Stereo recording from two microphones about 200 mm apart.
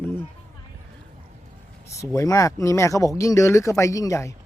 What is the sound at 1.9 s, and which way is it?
Speech, 15° left (ahead or behind).